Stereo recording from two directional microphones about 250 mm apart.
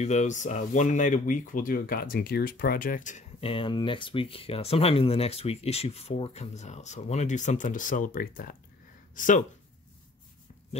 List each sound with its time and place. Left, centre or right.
0.0 s speech: left